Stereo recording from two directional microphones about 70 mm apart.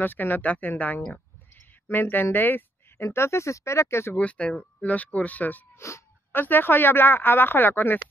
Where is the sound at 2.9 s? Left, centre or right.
Left.